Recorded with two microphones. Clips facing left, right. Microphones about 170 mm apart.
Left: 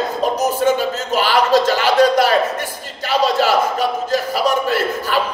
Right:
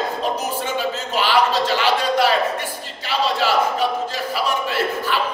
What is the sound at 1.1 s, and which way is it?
A man's voice, 45° left (ahead or behind).